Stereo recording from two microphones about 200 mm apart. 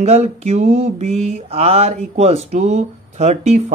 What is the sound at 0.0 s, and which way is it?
Mantra, 35° right (ahead or behind).